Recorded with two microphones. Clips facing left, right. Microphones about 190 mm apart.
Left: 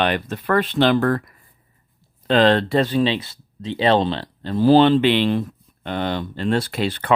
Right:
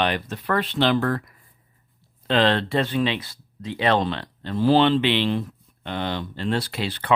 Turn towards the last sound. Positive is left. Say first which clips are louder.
# left 4 dB
turn(degrees=50)  # may be behind; listen again after turning